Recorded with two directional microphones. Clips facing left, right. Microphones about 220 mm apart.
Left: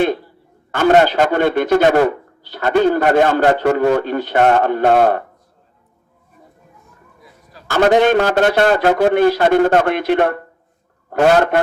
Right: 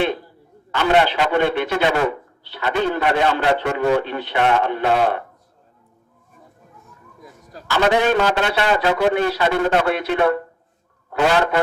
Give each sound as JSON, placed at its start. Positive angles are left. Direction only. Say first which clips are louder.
{"t": 0.7, "sound": "a man's voice", "louder": "left 5 dB", "side_deg": 45}
{"t": 7.2, "sound": "a sound", "louder": "right 5 dB", "side_deg": -45}
{"t": 7.7, "sound": "a man's voice", "louder": "left 5 dB", "side_deg": 45}